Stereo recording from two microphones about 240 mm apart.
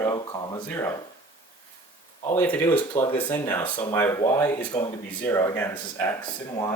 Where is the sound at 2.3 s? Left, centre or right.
Centre.